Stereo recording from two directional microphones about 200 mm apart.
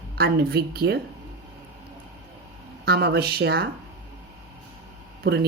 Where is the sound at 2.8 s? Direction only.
55° right (ahead or behind).